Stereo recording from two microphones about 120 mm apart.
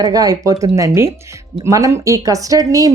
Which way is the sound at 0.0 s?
30° right (ahead or behind).